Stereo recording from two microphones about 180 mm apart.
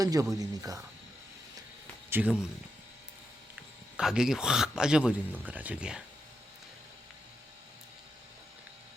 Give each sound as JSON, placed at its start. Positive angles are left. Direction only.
{"t": 0.0, "sound": "speech", "side_deg": -20}
{"t": 2.0, "sound": "speech", "side_deg": -10}
{"t": 3.5, "sound": "speech", "side_deg": -5}